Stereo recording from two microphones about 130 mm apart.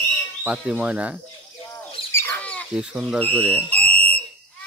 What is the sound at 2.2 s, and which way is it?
Bird, 10° left (ahead or behind).